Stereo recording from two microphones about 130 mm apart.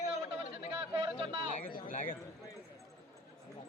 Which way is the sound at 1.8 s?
80° left.